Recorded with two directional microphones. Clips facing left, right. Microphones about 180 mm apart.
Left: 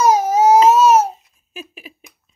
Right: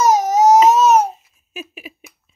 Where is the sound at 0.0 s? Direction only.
10° left (ahead or behind).